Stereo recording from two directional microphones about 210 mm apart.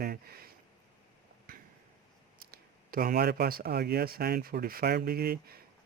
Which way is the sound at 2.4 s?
45° right (ahead or behind).